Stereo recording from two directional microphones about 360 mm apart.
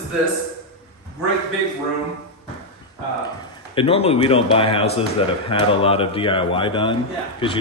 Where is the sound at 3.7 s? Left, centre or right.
Centre.